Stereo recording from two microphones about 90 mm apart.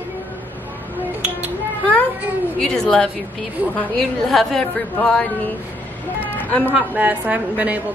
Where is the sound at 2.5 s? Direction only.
5° left (ahead or behind).